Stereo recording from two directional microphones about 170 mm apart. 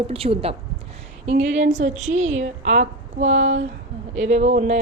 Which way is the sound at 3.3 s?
90° right.